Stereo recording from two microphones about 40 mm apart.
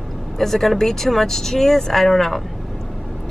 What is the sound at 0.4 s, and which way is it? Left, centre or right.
Speech, centre.